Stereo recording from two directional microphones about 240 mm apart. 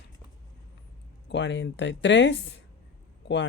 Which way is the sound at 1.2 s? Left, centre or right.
Left.